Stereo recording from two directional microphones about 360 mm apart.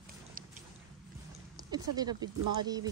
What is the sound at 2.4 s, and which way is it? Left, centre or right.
Speech, right.